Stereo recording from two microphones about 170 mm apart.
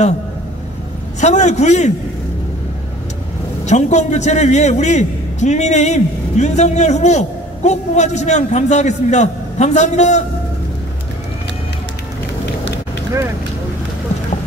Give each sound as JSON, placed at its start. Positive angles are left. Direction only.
{"t": 1.2, "sound": "a man's voice", "side_deg": 40}
{"t": 3.6, "sound": "a man's voice", "side_deg": 40}